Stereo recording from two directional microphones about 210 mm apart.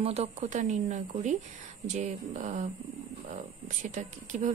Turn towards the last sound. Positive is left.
turn(degrees=-35)  # may be behind; listen again after turning